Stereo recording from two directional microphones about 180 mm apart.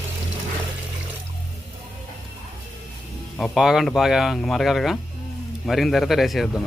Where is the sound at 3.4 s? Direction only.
5° right (ahead or behind).